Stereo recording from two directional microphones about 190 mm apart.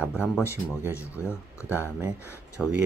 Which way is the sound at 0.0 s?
5° right (ahead or behind).